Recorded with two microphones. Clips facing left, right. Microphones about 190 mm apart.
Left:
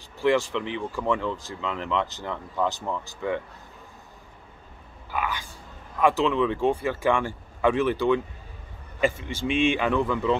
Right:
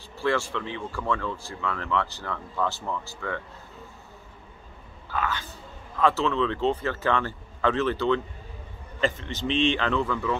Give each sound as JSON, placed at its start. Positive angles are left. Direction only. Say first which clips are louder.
{"t": 0.2, "sound": "speech", "louder": "left 4 dB", "side_deg": 15}
{"t": 5.1, "sound": "speech", "louder": "even", "side_deg": 15}